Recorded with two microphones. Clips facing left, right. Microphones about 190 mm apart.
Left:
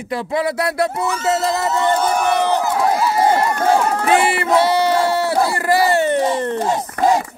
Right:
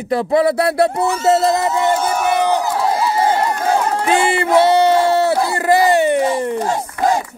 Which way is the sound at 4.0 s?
25° right (ahead or behind).